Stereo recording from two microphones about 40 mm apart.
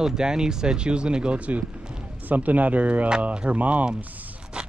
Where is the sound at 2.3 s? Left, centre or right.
Right.